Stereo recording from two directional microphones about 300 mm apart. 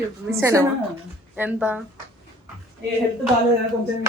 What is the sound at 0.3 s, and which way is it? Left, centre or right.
A woman's voice, centre.